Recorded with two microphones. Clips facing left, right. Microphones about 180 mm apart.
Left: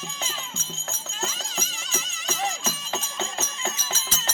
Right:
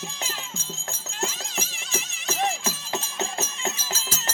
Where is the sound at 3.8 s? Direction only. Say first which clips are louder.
Even; 10° right (ahead or behind).